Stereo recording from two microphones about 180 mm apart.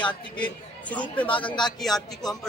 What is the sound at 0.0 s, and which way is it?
A man's voice, 5° left (ahead or behind).